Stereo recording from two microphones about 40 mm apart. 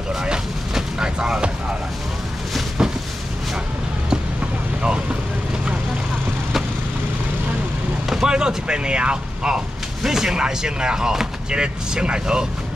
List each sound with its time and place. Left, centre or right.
0.1 s vehicle: centre
2.8 s a sound: centre
8.1 s artillery fire: centre
10.0 s speech: centre